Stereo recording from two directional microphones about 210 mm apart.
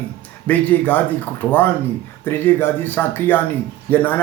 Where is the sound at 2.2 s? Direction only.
10° left (ahead or behind).